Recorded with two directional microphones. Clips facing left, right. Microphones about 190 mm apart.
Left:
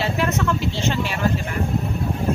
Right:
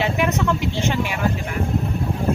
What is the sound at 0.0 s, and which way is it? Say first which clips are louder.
Speech: right 1 dB; 15° right (ahead or behind).